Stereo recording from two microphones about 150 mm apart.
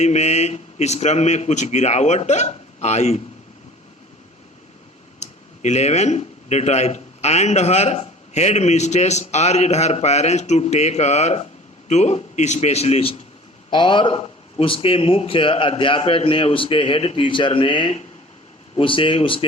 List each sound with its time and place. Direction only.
0.0 s speech: 50° left (ahead or behind)
5.2 s a man's voice: 50° left (ahead or behind)